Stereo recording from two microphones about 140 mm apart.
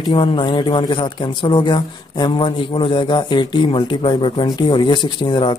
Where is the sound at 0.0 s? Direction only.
40° left (ahead or behind).